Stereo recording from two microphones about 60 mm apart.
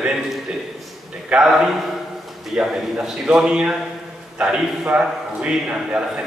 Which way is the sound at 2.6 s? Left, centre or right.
Centre.